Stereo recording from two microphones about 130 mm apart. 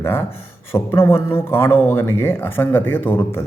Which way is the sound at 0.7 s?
20° left (ahead or behind).